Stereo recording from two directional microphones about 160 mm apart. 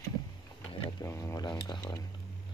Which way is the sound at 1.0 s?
20° left (ahead or behind).